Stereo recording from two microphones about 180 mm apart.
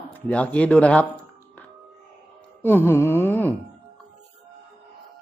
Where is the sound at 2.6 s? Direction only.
10° left (ahead or behind).